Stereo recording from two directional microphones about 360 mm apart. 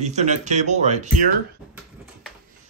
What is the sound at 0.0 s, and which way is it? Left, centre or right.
Speech, centre.